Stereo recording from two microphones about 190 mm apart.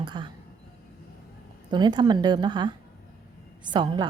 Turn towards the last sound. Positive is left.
turn(degrees=-25)  # may be behind; listen again after turning